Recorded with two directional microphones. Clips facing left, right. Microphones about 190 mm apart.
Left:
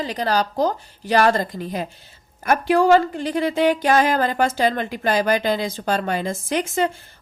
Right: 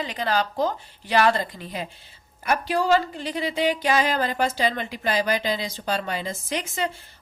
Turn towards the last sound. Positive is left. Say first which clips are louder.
# left 6 dB
turn(degrees=50)  # may be behind; listen again after turning